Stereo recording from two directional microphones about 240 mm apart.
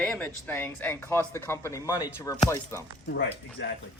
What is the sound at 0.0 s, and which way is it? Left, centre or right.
Speech, centre.